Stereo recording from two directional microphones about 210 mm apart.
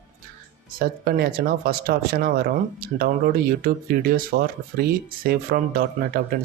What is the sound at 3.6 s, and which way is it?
Speech, 45° right (ahead or behind).